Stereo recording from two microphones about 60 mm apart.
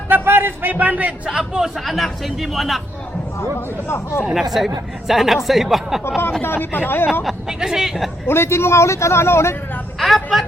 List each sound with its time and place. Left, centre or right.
0.1 s a man's voice: right
1.3 s speech: centre
3.8 s a man's voice: left
4.6 s speech: centre
6.4 s speech: left
7.3 s speech: centre
8.3 s a man's voice: left
10.0 s a sound: centre